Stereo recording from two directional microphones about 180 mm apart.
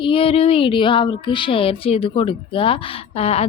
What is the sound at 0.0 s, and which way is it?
A woman's voice, 30° left (ahead or behind).